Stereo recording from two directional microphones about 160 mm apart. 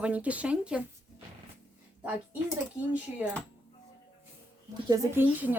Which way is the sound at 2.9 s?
10° right (ahead or behind).